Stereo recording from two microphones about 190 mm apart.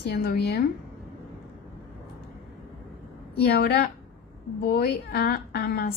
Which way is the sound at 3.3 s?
55° left (ahead or behind).